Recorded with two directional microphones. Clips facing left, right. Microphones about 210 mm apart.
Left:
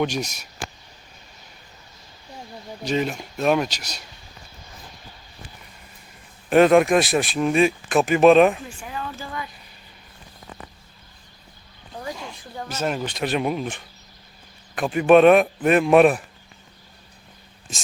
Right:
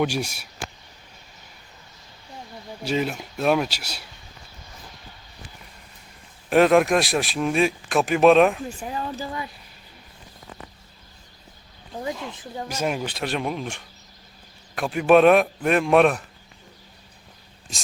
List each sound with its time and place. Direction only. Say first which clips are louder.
0.0 s speech: even; 10° right (ahead or behind)
2.8 s speech: left 1 dB; 5° right (ahead or behind)
6.5 s speech: left 2 dB; centre (ahead or behind)
8.8 s speech: right 3 dB; 35° right (ahead or behind)
12.4 s speech: left 3 dB; 15° right (ahead or behind); by 16.2 s 5° left (ahead or behind)